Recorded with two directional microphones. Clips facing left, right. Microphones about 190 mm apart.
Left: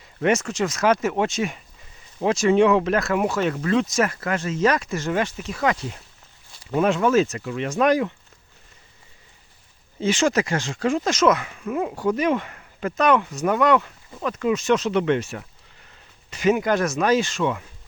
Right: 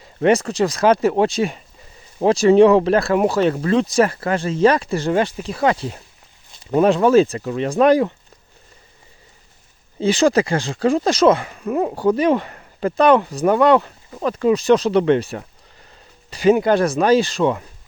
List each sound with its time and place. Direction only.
0.2 s speech: 35° right (ahead or behind)
10.0 s speech: 35° right (ahead or behind)